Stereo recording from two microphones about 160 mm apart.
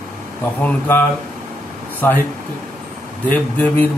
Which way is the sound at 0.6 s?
10° left (ahead or behind).